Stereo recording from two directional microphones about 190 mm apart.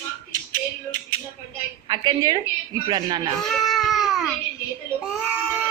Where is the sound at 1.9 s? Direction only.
20° right (ahead or behind).